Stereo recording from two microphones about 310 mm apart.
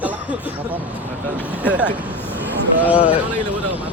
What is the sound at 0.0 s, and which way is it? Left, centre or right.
Speech, centre.